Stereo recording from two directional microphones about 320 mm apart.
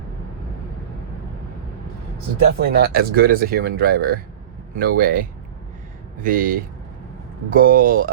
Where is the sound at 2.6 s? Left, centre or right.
Right.